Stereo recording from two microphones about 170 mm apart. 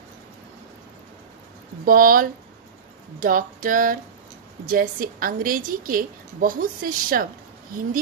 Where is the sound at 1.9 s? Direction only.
55° right (ahead or behind).